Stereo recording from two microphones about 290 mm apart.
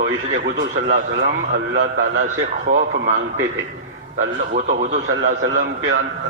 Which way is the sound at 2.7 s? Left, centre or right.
Right.